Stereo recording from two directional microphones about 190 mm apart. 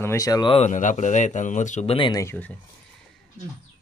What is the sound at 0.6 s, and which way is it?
Speech, 40° left (ahead or behind).